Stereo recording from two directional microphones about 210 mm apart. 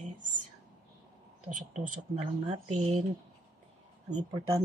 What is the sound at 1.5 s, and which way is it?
Speech, 35° right (ahead or behind).